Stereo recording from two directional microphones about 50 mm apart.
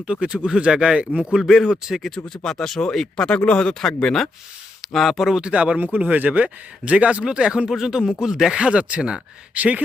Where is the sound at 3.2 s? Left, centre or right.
Left; by 5.4 s centre.